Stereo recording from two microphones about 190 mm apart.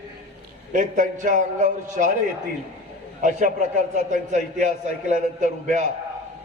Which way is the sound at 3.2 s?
40° right (ahead or behind).